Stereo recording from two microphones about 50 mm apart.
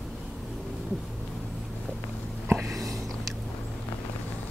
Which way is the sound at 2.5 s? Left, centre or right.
Right.